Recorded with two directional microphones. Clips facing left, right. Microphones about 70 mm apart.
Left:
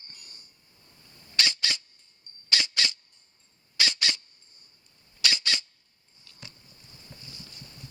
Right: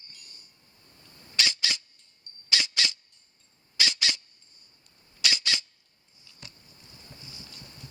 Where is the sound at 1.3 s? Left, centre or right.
Centre.